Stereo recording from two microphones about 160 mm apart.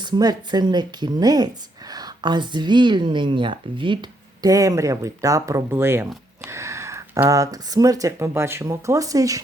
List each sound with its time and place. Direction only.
0.0 s speech: 25° right (ahead or behind)